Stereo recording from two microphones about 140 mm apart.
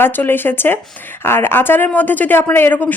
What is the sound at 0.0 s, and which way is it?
Speech, 15° left (ahead or behind).